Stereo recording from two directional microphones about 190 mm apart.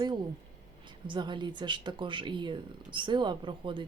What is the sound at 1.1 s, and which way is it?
Speech, 25° right (ahead or behind).